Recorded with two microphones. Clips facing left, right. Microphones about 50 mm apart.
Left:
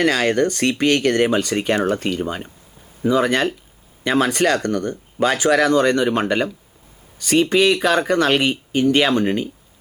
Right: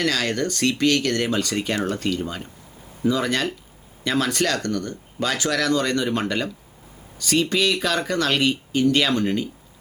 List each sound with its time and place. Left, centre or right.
0.0 s speech: left